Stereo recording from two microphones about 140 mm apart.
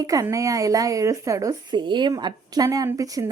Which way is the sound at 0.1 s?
25° right (ahead or behind).